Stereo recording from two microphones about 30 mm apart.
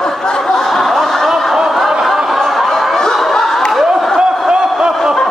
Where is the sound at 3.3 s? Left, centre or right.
Centre.